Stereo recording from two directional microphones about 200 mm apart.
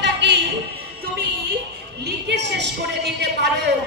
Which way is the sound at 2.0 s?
60° right (ahead or behind).